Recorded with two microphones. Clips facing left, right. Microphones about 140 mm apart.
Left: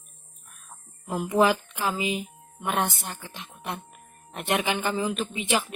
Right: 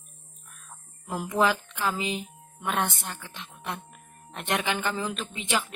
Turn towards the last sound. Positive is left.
turn(degrees=10)  # may be behind; listen again after turning